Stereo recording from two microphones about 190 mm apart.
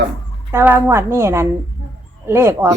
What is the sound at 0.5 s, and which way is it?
Speech, 10° right (ahead or behind).